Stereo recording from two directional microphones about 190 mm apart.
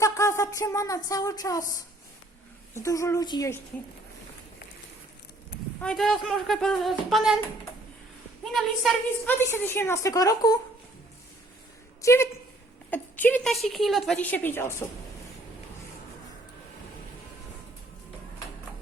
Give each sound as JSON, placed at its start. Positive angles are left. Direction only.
{"t": 0.0, "sound": "speech", "side_deg": 15}
{"t": 2.7, "sound": "a woman's voice", "side_deg": 15}
{"t": 5.8, "sound": "speech", "side_deg": 0}
{"t": 8.5, "sound": "speech", "side_deg": 0}
{"t": 9.4, "sound": "a woman's voice", "side_deg": 10}
{"t": 12.0, "sound": "a woman's voice", "side_deg": 15}